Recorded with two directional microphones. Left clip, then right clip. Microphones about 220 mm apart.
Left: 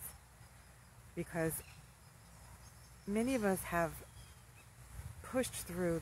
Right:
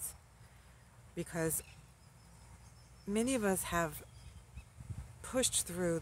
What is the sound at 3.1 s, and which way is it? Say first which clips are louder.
Speech: right 1 dB; 15° right (ahead or behind).